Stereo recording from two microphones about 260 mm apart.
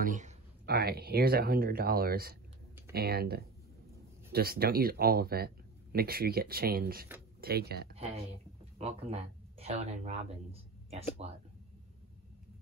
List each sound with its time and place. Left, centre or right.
0.0 s speech: right
7.9 s speech: right